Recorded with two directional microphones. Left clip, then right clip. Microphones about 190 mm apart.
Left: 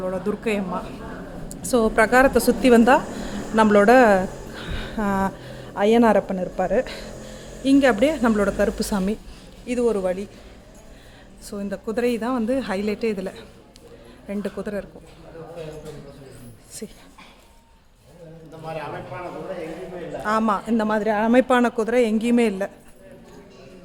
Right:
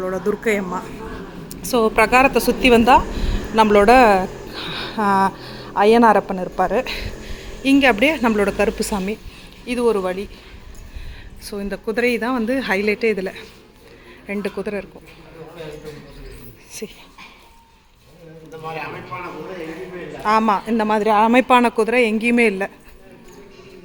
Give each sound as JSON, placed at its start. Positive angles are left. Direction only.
{"t": 0.0, "sound": "speech", "side_deg": 0}
{"t": 1.6, "sound": "a woman's voice", "side_deg": 25}
{"t": 8.9, "sound": "a woman's voice", "side_deg": 25}
{"t": 9.6, "sound": "speech", "side_deg": 5}
{"t": 11.4, "sound": "speech", "side_deg": 0}
{"t": 20.2, "sound": "speech", "side_deg": 0}